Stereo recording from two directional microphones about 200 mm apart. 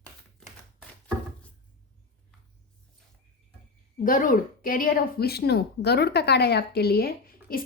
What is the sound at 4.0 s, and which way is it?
Speech, 40° left (ahead or behind).